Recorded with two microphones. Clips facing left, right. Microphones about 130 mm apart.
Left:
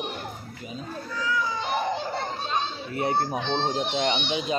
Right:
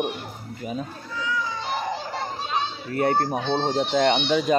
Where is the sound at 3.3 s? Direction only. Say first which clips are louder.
Right 3 dB; 10° right (ahead or behind).